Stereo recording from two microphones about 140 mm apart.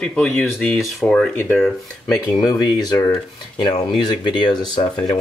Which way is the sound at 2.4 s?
30° left (ahead or behind).